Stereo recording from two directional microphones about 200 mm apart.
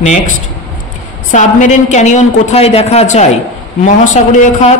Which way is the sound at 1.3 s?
35° left (ahead or behind).